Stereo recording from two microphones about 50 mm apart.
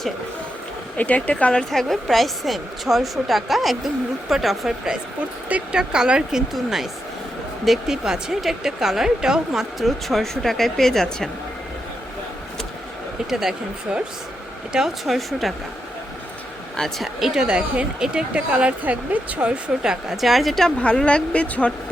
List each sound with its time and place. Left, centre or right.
0.9 s speech: left
1.7 s a woman's voice: centre
5.7 s a woman's voice: centre
9.8 s a woman's voice: centre
13.3 s a woman's voice: centre
17.0 s a woman's voice: centre
18.5 s speech: right
19.8 s a woman's voice: centre
20.7 s speech: centre